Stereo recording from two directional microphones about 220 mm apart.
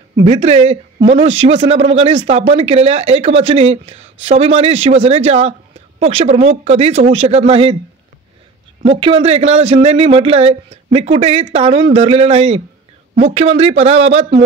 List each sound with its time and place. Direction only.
0.2 s speech: 25° right (ahead or behind)
8.8 s speech: 25° right (ahead or behind)